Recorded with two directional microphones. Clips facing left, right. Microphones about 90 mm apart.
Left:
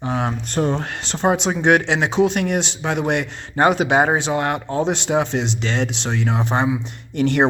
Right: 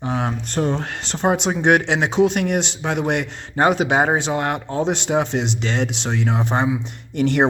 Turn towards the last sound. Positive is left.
turn(degrees=-5)  # may be behind; listen again after turning